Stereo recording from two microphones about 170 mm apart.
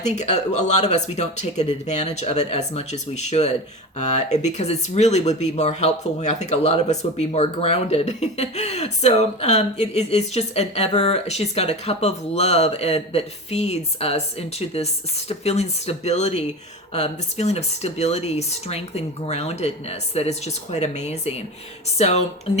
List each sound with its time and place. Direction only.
0.0 s speech: 45° left (ahead or behind)